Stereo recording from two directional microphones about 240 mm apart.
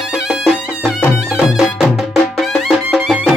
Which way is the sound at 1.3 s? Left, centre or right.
Centre.